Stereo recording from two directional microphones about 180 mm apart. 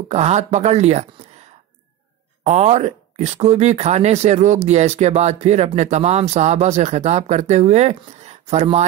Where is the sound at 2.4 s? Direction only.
40° right (ahead or behind).